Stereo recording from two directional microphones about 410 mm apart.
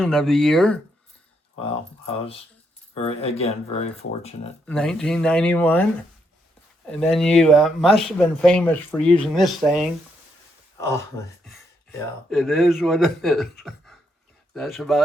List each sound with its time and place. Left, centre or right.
0.0 s speech: centre
1.6 s speech: centre
4.6 s speech: centre